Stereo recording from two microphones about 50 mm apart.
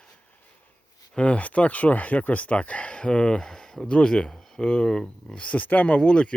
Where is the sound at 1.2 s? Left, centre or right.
Left.